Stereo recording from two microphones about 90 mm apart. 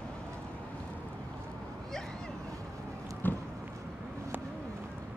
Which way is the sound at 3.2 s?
20° left (ahead or behind).